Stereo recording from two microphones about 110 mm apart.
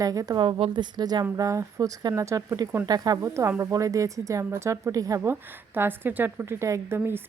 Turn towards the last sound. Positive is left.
turn(degrees=-20)  # may be behind; listen again after turning